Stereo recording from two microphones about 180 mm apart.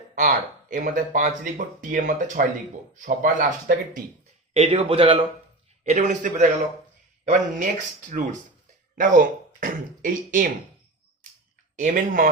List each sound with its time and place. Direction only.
0.2 s speech: 45° right (ahead or behind)
4.5 s speech: 35° right (ahead or behind)
5.8 s speech: 40° right (ahead or behind)
9.0 s speech: 50° right (ahead or behind)
11.8 s speech: 45° right (ahead or behind)